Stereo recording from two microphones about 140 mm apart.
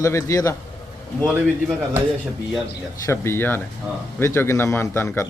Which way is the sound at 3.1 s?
15° left (ahead or behind).